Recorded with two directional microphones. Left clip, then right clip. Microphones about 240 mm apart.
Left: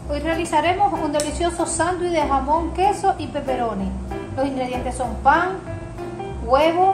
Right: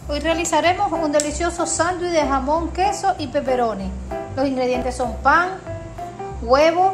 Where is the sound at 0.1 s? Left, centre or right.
Right.